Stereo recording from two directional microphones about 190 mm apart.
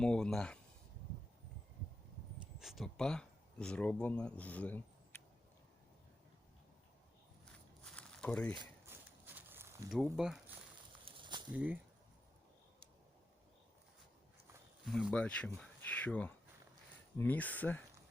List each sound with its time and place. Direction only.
0.0 s speech: 5° left (ahead or behind)
2.6 s speech: centre (ahead or behind)
7.9 s a sound: 5° left (ahead or behind)
8.9 s a sound: 10° right (ahead or behind)
9.9 s speech: centre (ahead or behind)
11.0 s snake: 25° right (ahead or behind)
11.5 s speech: 5° right (ahead or behind)
14.9 s speech: 5° left (ahead or behind)